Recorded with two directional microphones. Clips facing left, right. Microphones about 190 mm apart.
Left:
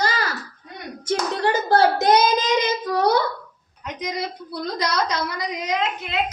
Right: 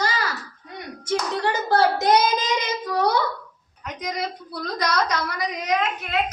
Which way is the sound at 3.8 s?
25° left (ahead or behind).